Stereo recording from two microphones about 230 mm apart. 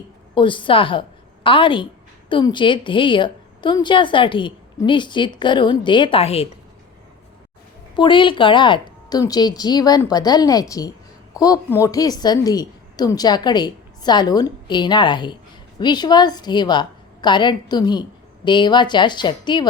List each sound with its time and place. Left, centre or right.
0.3 s a woman's voice: left
7.9 s a woman's voice: left